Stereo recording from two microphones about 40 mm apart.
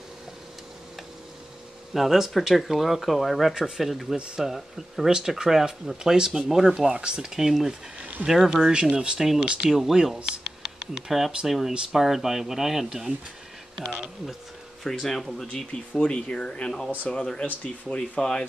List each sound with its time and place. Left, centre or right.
2.0 s speech: centre
3.5 s speech: centre
3.8 s speech: centre; by 7.3 s right
7.3 s speech: centre
8.0 s a sound: right
8.3 s speech: centre
8.9 s speech: right
9.7 s speech: centre
10.1 s computer keyboard: centre
11.1 s speech: centre
14.8 s speech: centre
15.9 s speech: left